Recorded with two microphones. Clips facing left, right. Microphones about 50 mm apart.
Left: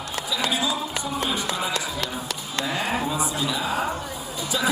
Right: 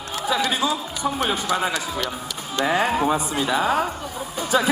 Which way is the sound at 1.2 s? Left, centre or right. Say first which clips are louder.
Right 5 dB; right.